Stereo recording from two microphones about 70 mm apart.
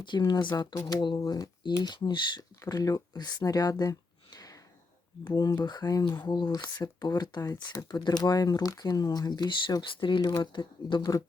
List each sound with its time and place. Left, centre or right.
0.3 s speech: left
1.8 s speech: left
2.6 s speech: left
4.3 s a sound: left
5.3 s speech: left